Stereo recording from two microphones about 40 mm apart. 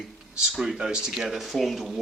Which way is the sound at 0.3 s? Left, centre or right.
Centre.